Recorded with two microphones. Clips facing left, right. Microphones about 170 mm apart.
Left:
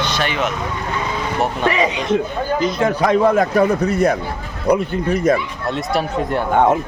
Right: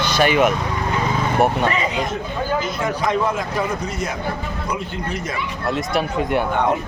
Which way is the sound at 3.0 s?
60° left (ahead or behind).